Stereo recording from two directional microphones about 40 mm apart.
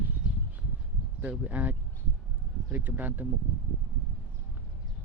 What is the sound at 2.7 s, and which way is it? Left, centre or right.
Speech, right.